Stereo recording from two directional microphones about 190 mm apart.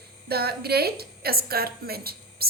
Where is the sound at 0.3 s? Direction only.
55° right (ahead or behind).